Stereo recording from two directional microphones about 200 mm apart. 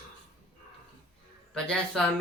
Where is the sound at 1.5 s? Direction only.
5° left (ahead or behind).